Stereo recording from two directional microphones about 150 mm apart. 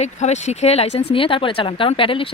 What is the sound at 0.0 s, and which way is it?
Speech, 50° left (ahead or behind).